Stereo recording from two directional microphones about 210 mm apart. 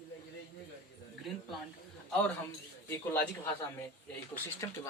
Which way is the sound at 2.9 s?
10° left (ahead or behind).